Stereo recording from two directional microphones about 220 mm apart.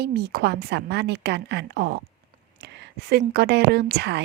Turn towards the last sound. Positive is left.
turn(degrees=-50)  # may be behind; listen again after turning